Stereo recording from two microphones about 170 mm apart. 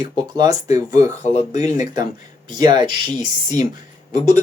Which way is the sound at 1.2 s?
40° left (ahead or behind).